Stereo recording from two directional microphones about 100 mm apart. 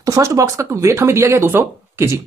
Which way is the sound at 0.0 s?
35° right (ahead or behind).